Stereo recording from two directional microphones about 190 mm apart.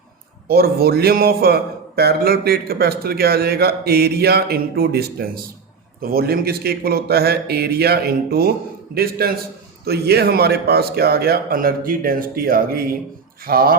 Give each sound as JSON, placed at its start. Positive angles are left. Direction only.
{"t": 0.4, "sound": "a man's voice", "side_deg": -55}